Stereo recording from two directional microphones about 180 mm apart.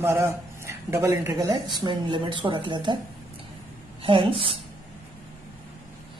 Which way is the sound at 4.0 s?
30° right (ahead or behind).